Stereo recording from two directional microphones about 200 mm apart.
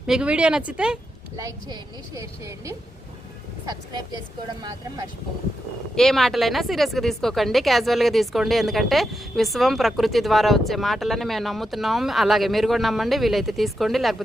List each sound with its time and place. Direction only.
0.1 s speech: 5° right (ahead or behind)
1.4 s a woman's voice: 15° right (ahead or behind)
5.9 s speech: centre (ahead or behind)